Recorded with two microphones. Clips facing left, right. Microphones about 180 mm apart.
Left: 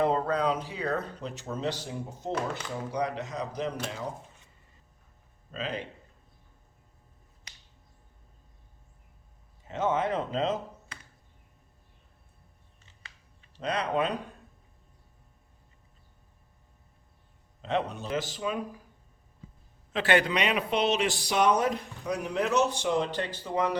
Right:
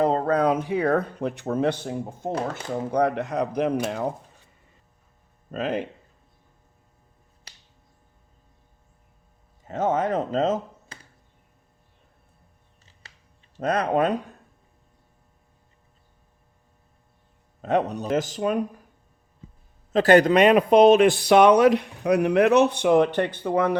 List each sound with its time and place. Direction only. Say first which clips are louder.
0.0 s a sound: right 4 dB; 40° right (ahead or behind)
0.3 s speech: right 7 dB; 50° right (ahead or behind)
5.5 s speech: right 8 dB; 50° right (ahead or behind)
9.6 s speech: right 4 dB; 40° right (ahead or behind)
13.6 s speech: right 7 dB; 50° right (ahead or behind)
17.6 s speech: right 7 dB; 45° right (ahead or behind)
19.9 s speech: right 9 dB; 40° right (ahead or behind); by 23.7 s 55° right (ahead or behind)